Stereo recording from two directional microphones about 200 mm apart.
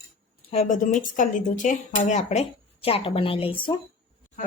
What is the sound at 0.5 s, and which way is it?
Speech, 30° left (ahead or behind).